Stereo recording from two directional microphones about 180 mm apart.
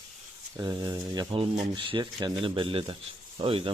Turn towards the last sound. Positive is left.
turn(degrees=-30)  # may be behind; listen again after turning